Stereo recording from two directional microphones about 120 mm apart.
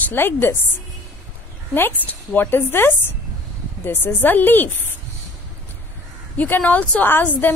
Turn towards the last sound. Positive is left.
turn(degrees=15)  # may be behind; listen again after turning